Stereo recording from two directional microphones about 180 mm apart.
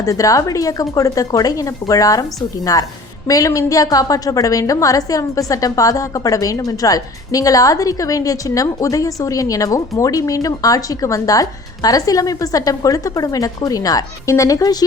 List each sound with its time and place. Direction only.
0.0 s a woman's voice: 20° left (ahead or behind)